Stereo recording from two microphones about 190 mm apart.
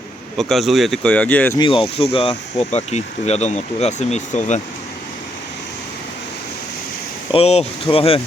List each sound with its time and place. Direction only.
0.3 s speech: centre (ahead or behind)
1.5 s speech: 25° left (ahead or behind)
7.3 s speech: 30° left (ahead or behind)